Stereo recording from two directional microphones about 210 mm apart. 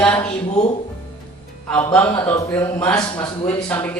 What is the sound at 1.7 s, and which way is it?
A man's voice, 10° left (ahead or behind).